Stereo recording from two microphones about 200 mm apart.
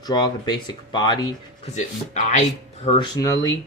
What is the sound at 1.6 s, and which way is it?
Speech, 35° left (ahead or behind).